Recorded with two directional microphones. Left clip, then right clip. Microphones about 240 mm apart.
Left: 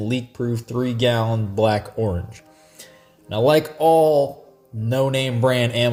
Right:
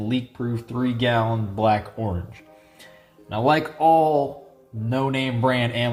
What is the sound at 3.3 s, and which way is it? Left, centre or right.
Speech, left.